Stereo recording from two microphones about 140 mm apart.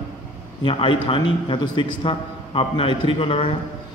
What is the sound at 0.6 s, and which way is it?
A man's voice, 40° left (ahead or behind).